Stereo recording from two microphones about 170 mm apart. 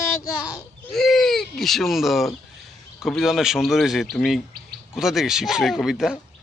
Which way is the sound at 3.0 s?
Centre (ahead or behind).